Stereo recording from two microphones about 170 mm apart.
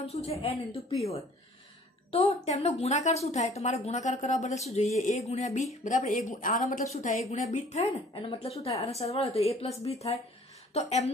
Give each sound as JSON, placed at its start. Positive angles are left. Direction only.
{"t": 0.0, "sound": "a woman's voice", "side_deg": 40}
{"t": 2.1, "sound": "a woman's voice", "side_deg": 40}